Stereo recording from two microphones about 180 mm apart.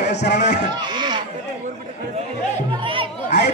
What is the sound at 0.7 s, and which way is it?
Speech, 25° right (ahead or behind).